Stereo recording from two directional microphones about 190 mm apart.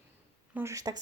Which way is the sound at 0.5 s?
15° right (ahead or behind).